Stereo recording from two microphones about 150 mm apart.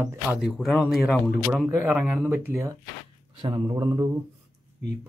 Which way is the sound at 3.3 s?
25° right (ahead or behind).